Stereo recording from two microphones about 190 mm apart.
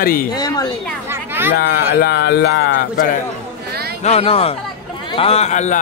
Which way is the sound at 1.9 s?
65° left (ahead or behind).